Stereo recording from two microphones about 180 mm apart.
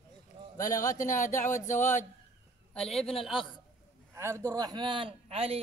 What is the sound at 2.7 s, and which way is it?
Speech, 5° left (ahead or behind).